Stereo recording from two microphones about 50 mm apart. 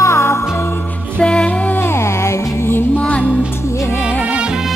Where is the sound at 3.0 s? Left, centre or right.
Left.